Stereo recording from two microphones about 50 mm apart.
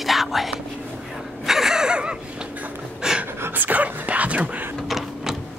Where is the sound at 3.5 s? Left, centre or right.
Right.